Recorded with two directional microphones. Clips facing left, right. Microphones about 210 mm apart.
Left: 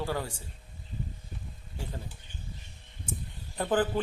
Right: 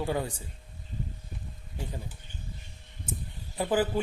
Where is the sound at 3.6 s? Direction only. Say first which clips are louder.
Right 1 dB; 10° right (ahead or behind).